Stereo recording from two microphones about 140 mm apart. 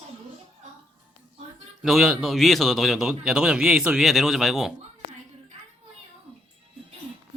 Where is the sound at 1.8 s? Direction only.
5° right (ahead or behind).